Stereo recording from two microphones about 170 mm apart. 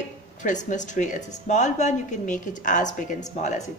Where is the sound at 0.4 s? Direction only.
50° left (ahead or behind).